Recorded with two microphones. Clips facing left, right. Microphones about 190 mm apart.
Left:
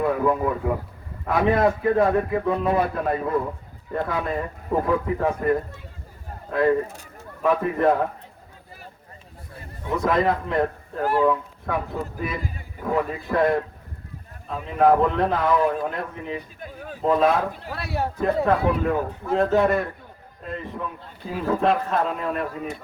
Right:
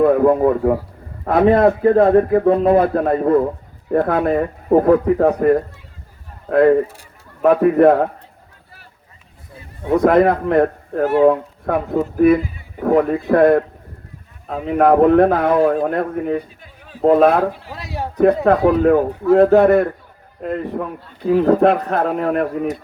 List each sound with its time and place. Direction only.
0.0 s a man's voice: 50° right (ahead or behind)
6.5 s a man's voice: 55° right (ahead or behind)
9.9 s a man's voice: 60° right (ahead or behind)
16.6 s a sound: 50° left (ahead or behind)
17.0 s a man's voice: 60° right (ahead or behind)
17.7 s a man's voice: 15° right (ahead or behind)
18.8 s a man's voice: 60° right (ahead or behind)